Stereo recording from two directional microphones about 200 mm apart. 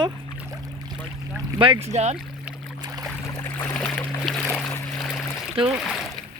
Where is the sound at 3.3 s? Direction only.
10° left (ahead or behind).